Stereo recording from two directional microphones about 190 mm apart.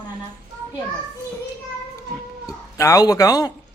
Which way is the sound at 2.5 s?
15° left (ahead or behind).